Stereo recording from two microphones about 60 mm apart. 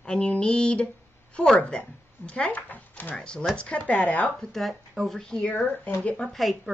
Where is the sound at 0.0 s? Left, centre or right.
Centre.